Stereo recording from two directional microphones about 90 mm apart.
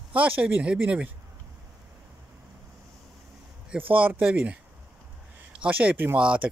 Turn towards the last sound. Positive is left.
turn(degrees=-15)  # may be behind; listen again after turning